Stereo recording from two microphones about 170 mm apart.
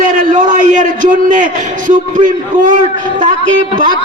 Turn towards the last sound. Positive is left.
turn(degrees=-50)  # may be behind; listen again after turning